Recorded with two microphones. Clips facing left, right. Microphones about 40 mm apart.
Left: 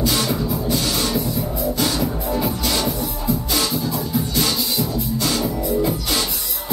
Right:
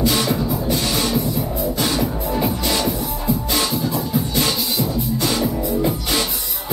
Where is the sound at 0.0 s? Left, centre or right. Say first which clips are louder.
Right 2 dB; centre.